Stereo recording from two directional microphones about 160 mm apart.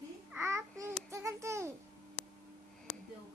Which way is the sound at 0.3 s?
15° right (ahead or behind).